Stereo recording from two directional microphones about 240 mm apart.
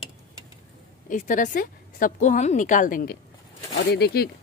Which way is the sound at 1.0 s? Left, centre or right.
Left.